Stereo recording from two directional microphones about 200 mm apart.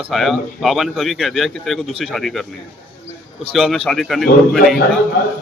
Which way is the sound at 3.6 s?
Centre (ahead or behind).